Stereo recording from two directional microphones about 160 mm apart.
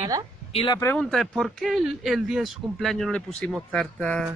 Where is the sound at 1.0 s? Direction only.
Centre (ahead or behind).